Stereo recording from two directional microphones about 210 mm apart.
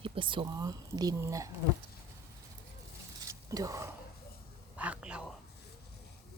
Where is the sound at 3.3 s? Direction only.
15° right (ahead or behind).